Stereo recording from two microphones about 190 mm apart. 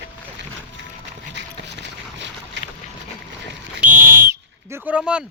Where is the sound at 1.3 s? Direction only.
65° right (ahead or behind).